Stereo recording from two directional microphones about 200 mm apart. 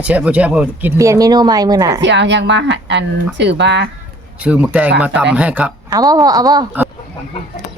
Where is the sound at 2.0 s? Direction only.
60° right (ahead or behind).